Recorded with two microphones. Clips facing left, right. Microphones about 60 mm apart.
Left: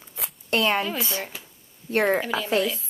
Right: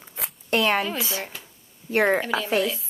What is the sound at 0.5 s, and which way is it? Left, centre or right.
Speech, right.